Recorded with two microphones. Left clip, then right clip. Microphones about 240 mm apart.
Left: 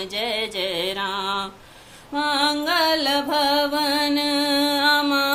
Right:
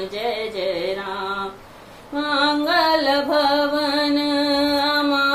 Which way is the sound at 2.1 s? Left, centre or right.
Left.